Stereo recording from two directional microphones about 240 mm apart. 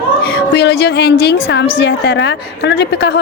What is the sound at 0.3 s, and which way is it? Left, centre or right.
A woman's voice, left.